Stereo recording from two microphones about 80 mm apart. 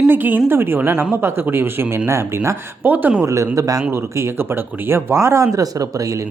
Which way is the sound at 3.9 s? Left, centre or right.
Right.